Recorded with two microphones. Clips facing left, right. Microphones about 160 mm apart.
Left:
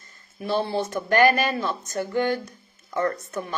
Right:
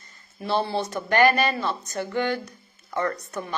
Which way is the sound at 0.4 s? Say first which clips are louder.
Even; 50° left (ahead or behind).